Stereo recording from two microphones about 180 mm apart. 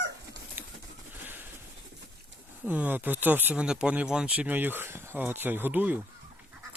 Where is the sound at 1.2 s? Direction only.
10° right (ahead or behind).